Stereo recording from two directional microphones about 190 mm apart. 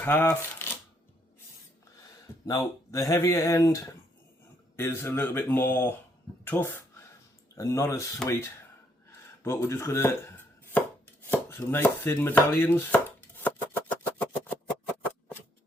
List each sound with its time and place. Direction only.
0.0 s speech: 10° left (ahead or behind)
2.5 s speech: 15° left (ahead or behind)
9.4 s chopping: 15° left (ahead or behind)